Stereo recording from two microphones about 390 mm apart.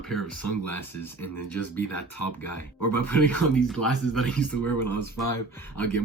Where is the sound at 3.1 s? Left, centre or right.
Centre.